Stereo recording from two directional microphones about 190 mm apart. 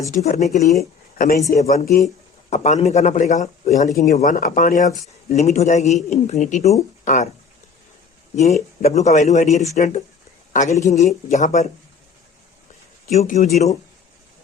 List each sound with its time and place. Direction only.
0.1 s a man's voice: 35° left (ahead or behind)
0.8 s speech: 50° left (ahead or behind)
2.5 s a man's voice: 40° left (ahead or behind)
8.8 s a man's voice: 35° left (ahead or behind)
13.1 s a man's voice: 40° left (ahead or behind)